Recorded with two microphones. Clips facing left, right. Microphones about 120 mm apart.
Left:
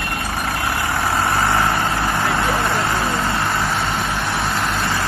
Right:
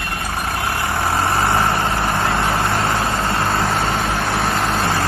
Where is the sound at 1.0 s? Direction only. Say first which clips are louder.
Right 1 dB; 25° right (ahead or behind).